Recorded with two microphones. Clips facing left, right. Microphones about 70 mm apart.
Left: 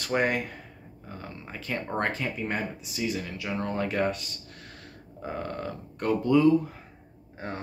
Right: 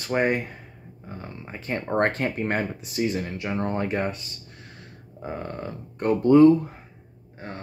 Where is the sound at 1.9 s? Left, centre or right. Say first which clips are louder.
Right 7 dB; right.